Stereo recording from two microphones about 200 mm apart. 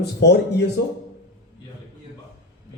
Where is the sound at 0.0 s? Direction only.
55° left (ahead or behind).